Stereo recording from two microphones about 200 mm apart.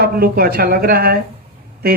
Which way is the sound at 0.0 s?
50° right (ahead or behind).